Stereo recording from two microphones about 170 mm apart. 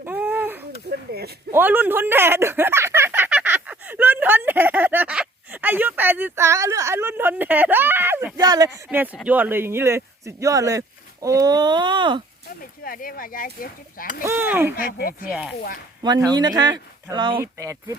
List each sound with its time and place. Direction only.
0.0 s a sound: 10° right (ahead or behind)
0.9 s a sound: 70° right (ahead or behind)
1.5 s a sound: 10° right (ahead or behind)
9.1 s speech: 10° right (ahead or behind); by 12.2 s 30° right (ahead or behind)
12.8 s speech: 55° left (ahead or behind)
14.3 s speech: 10° right (ahead or behind)
14.8 s speech: 60° left (ahead or behind)
15.3 s speech: 5° right (ahead or behind)
16.3 s speech: 25° right (ahead or behind)